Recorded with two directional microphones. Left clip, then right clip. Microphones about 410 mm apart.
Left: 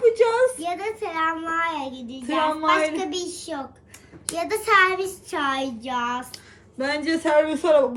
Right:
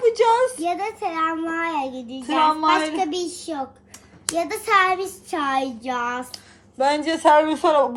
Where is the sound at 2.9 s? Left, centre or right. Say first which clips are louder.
Right 4 dB; centre.